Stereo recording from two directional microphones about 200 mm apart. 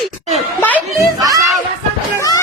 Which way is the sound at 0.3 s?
10° left (ahead or behind).